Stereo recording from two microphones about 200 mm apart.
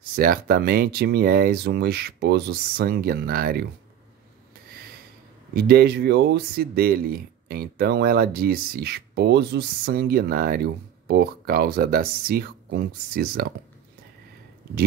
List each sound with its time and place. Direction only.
0.1 s speech: 45° right (ahead or behind)
5.5 s speech: 50° right (ahead or behind)